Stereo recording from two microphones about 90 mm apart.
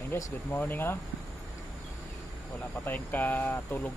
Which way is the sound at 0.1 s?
20° left (ahead or behind).